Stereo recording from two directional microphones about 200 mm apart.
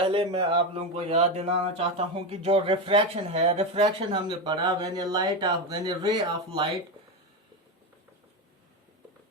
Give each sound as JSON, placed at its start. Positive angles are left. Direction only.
{"t": 0.0, "sound": "speech", "side_deg": -25}